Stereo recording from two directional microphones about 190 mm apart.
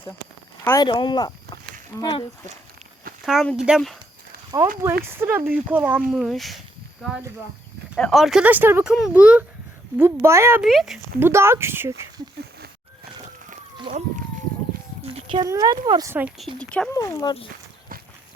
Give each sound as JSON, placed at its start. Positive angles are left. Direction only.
{"t": 0.6, "sound": "speech", "side_deg": 10}
{"t": 0.9, "sound": "speech", "side_deg": 25}
{"t": 3.2, "sound": "speech", "side_deg": 0}
{"t": 4.5, "sound": "speech", "side_deg": -20}
{"t": 7.9, "sound": "speech", "side_deg": 0}
{"t": 10.6, "sound": "speech", "side_deg": 0}
{"t": 11.3, "sound": "speech", "side_deg": -15}
{"t": 13.9, "sound": "a sound", "side_deg": -25}
{"t": 15.0, "sound": "speech", "side_deg": -25}
{"t": 16.6, "sound": "speech", "side_deg": 5}
{"t": 16.9, "sound": "speech", "side_deg": 20}